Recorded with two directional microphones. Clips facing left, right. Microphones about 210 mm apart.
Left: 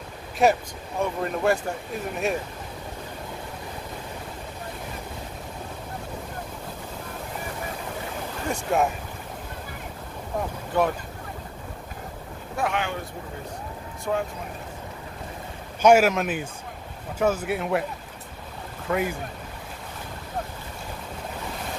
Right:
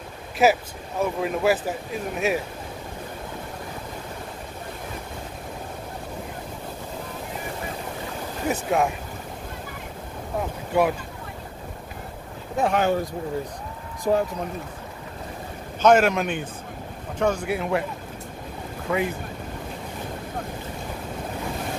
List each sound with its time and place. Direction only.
0.4 s speech: 5° right (ahead or behind)
8.5 s speech: centre (ahead or behind)
10.7 s speech: 10° right (ahead or behind)
12.6 s speech: 40° right (ahead or behind)
14.1 s speech: 35° right (ahead or behind)
15.8 s speech: 5° left (ahead or behind)
18.9 s speech: centre (ahead or behind)